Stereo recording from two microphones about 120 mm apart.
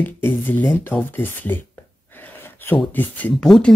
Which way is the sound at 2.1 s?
20° left (ahead or behind).